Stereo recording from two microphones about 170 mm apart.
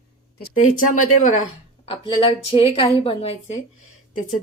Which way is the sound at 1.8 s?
35° left (ahead or behind).